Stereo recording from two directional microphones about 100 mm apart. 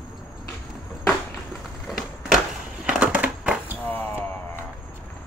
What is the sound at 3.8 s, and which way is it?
Music, 20° left (ahead or behind).